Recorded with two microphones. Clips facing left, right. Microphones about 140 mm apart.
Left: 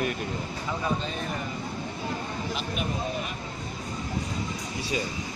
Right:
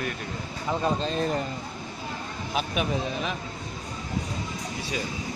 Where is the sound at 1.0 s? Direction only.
35° right (ahead or behind).